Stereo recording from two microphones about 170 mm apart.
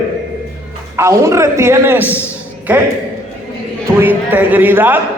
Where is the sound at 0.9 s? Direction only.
15° right (ahead or behind).